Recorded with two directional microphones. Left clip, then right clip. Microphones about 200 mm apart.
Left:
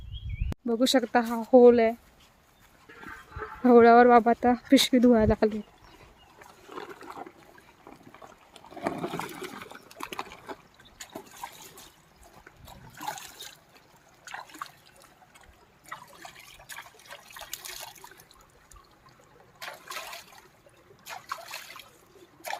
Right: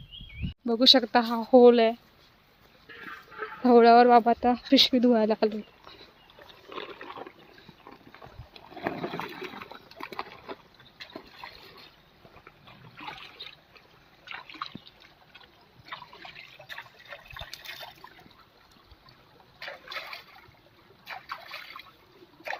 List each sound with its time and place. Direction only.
0.6 s speech: 5° left (ahead or behind)
3.0 s a sound: 60° left (ahead or behind)
3.6 s speech: 15° left (ahead or behind)
6.7 s a sound: 50° left (ahead or behind)
7.9 s boat: 25° left (ahead or behind)
8.5 s water: 25° left (ahead or behind)
16.6 s water: 20° left (ahead or behind)
21.1 s trickle: 10° left (ahead or behind)